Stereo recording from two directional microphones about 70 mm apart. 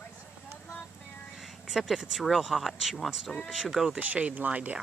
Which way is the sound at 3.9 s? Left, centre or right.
Right.